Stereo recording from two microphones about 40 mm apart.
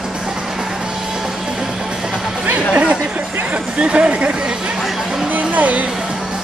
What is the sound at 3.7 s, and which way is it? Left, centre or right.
Speech, right.